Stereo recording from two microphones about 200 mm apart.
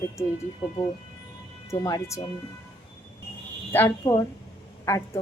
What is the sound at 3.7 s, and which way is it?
Speech, 15° left (ahead or behind).